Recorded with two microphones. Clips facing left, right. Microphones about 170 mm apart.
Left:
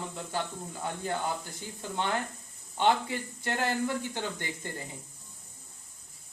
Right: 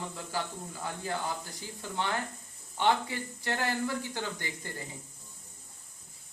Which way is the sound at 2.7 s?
20° left (ahead or behind).